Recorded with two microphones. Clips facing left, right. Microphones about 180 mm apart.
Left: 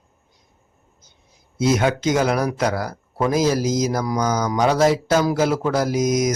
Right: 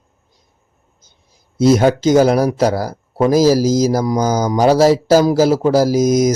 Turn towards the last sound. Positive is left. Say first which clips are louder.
# right 6 dB
turn(degrees=-35)  # may be behind; listen again after turning